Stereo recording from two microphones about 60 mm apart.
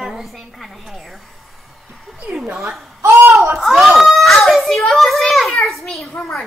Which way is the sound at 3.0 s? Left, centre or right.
Right.